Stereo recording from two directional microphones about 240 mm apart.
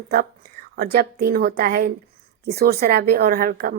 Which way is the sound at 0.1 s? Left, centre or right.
Right.